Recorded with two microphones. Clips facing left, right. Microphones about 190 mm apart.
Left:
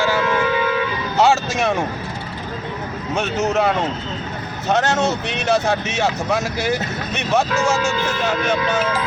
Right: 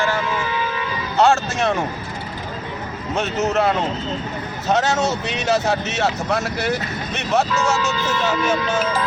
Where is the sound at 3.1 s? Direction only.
Centre (ahead or behind).